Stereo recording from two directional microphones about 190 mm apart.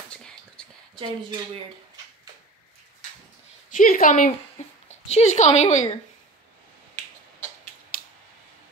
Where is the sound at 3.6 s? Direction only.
45° left (ahead or behind).